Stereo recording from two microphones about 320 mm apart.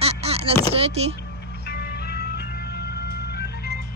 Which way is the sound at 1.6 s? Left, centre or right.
Left.